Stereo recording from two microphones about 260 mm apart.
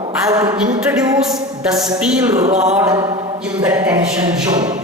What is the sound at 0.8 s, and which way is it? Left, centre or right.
Speech, centre.